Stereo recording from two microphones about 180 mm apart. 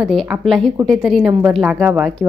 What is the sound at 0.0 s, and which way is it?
A woman's voice, centre (ahead or behind).